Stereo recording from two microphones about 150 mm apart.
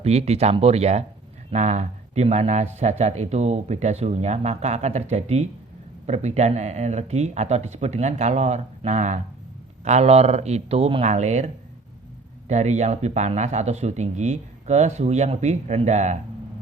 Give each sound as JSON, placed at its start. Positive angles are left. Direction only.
{"t": 0.0, "sound": "speech", "side_deg": -45}